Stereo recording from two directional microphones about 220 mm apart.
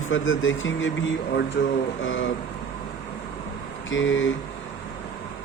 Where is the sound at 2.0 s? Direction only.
60° left (ahead or behind).